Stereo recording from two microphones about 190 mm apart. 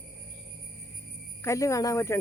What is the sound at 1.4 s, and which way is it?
Speech, 15° left (ahead or behind).